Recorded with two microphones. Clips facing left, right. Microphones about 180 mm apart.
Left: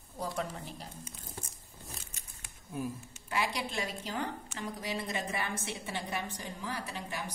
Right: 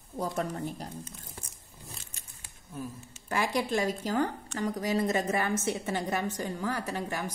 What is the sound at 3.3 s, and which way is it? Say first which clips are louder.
A woman's voice: right 6 dB; 45° right (ahead or behind).